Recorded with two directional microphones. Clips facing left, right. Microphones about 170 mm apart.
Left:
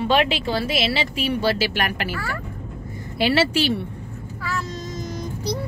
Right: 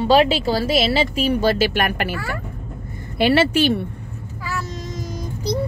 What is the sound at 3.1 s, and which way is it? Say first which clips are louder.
Speech: right 3 dB; 55° right (ahead or behind).